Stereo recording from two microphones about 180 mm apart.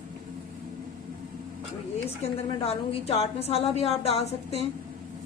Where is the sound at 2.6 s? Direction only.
35° left (ahead or behind).